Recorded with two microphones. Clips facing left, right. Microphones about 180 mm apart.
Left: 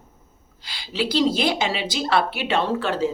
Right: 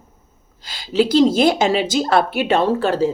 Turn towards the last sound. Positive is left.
turn(degrees=-40)  # may be behind; listen again after turning